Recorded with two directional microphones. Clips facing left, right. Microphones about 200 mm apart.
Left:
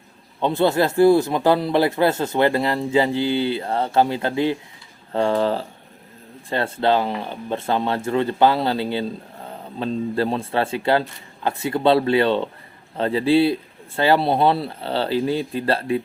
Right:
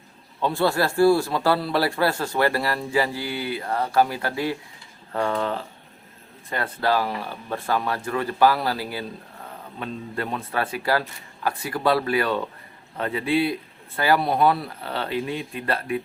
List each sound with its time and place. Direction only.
0.3 s speech: 20° left (ahead or behind)